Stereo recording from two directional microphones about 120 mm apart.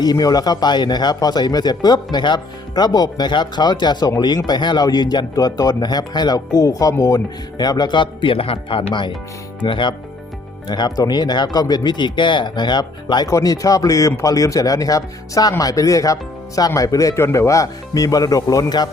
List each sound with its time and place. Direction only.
0.0 s speech: 35° left (ahead or behind)